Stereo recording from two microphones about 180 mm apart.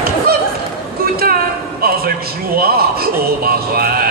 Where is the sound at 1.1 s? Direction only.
55° right (ahead or behind).